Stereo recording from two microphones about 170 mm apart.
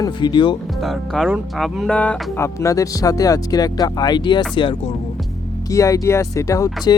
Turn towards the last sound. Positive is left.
turn(degrees=20)  # may be behind; listen again after turning